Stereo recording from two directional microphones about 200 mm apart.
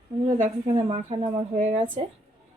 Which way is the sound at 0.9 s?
30° right (ahead or behind).